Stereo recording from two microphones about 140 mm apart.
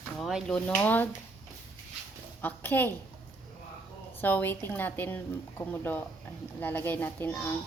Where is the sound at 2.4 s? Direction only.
15° left (ahead or behind).